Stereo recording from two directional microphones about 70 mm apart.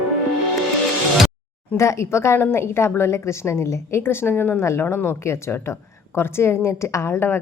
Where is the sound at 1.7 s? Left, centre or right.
Left.